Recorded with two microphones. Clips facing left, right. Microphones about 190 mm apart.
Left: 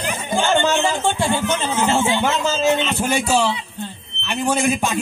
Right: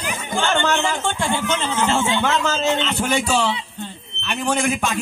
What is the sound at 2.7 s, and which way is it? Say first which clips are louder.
A man's voice: left 2 dB; 15° left (ahead or behind).